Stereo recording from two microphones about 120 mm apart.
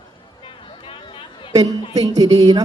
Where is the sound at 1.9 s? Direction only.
30° right (ahead or behind).